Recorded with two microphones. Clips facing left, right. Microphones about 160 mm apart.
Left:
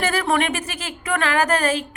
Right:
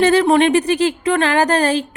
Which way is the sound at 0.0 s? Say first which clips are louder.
Right 9 dB; 30° right (ahead or behind).